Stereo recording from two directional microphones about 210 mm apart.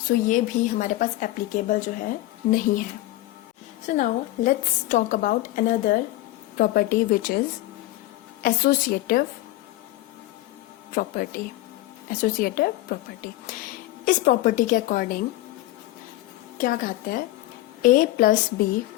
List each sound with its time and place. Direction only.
0.1 s a woman's voice: 40° left (ahead or behind)
3.8 s a woman's voice: 35° left (ahead or behind)
10.9 s a woman's voice: 45° left (ahead or behind)
16.6 s a woman's voice: 40° left (ahead or behind)